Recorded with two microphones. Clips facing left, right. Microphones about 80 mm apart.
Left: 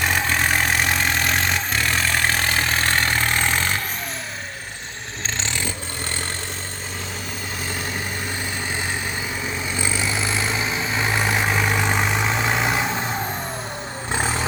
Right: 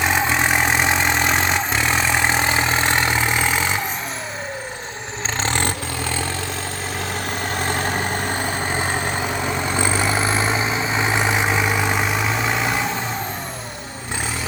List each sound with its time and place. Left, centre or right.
0.0 s vehicle: centre
5.4 s vehicle: right
7.5 s vehicle: right; by 12.9 s centre